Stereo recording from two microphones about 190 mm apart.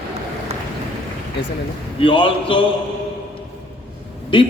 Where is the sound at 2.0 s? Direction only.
25° left (ahead or behind).